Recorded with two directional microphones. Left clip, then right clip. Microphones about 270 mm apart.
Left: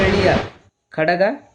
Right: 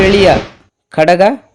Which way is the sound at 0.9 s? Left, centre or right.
Right.